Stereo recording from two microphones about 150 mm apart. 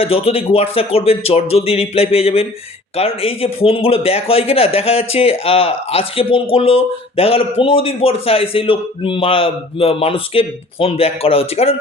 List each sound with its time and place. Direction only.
0.0 s a man's voice: 40° left (ahead or behind)